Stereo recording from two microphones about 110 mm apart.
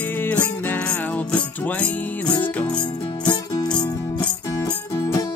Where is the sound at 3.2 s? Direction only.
40° left (ahead or behind).